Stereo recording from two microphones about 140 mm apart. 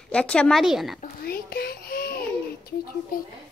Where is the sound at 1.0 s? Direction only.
90° left.